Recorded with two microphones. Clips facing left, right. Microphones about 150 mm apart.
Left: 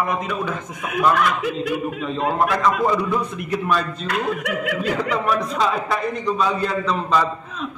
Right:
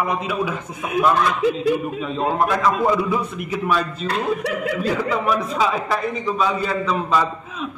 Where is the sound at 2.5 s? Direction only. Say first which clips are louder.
Right 1 dB; centre (ahead or behind).